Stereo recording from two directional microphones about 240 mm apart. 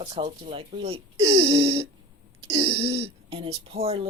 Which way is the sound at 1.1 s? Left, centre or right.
Right.